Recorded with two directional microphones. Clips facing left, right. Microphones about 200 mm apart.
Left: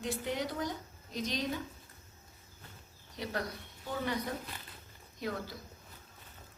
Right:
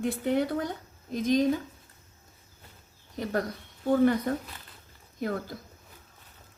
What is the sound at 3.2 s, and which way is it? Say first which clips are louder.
Speech: right 8 dB; 50° right (ahead or behind).